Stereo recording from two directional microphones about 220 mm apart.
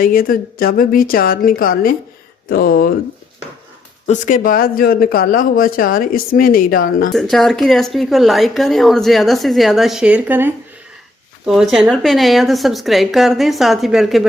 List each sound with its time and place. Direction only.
0.0 s speech: 40° left (ahead or behind)
4.0 s speech: 35° left (ahead or behind)
7.1 s speech: centre (ahead or behind)